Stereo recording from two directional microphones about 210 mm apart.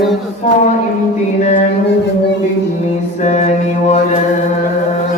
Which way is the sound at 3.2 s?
35° left (ahead or behind).